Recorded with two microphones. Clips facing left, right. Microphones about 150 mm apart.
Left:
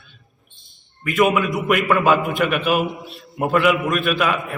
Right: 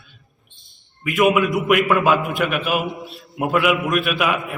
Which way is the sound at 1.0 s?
5° right (ahead or behind).